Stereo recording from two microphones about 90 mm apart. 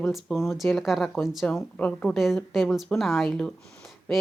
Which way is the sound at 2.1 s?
5° right (ahead or behind).